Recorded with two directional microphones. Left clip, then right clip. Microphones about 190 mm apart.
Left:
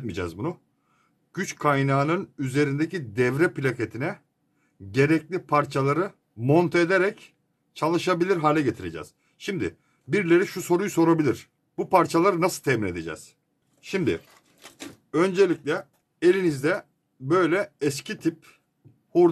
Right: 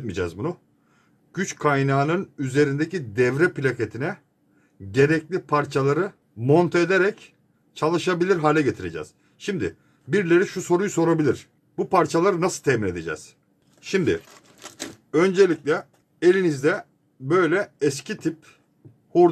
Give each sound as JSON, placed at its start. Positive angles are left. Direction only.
{"t": 0.0, "sound": "speech", "side_deg": 25}
{"t": 13.7, "sound": "speech", "side_deg": 15}